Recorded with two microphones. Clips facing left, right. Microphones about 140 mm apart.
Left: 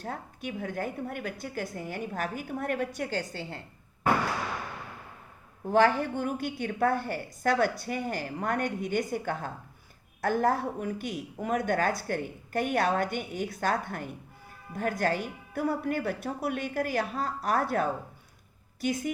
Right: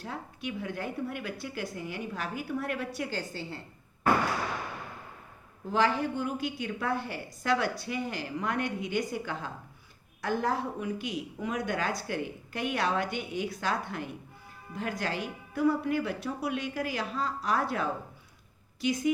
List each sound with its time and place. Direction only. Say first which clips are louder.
0.0 s speech: left 1 dB; 45° left (ahead or behind)
5.7 s speech: left 4 dB; 55° left (ahead or behind)